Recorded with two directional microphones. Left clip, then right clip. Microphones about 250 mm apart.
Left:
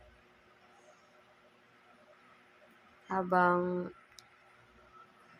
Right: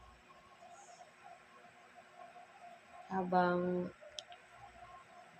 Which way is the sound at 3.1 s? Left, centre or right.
Centre.